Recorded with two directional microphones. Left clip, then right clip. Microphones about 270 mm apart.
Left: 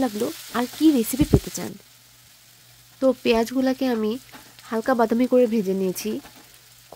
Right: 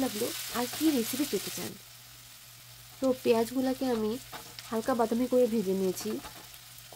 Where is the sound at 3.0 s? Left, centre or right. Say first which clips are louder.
Left 7 dB; left.